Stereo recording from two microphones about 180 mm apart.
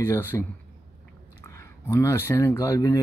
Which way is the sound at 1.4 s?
15° left (ahead or behind).